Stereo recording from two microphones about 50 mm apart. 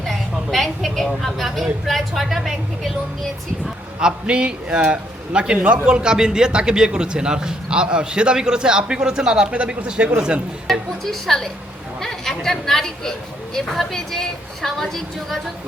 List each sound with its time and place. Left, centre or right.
0.1 s a woman's voice: centre
4.0 s a man's voice: centre
10.7 s a woman's voice: centre